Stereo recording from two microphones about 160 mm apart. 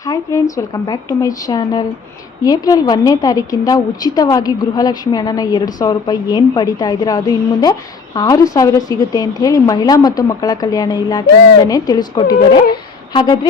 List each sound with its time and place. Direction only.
0.0 s a woman's voice: 20° left (ahead or behind)